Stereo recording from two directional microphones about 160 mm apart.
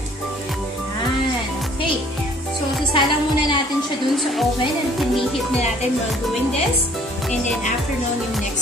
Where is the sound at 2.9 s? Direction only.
30° left (ahead or behind).